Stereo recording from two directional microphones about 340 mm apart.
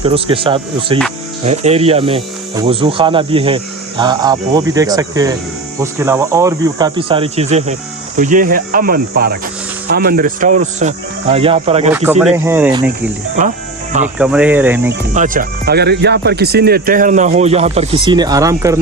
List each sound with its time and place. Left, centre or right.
0.0 s speech: centre
11.9 s speech: centre
14.2 s speech: centre
15.1 s speech: right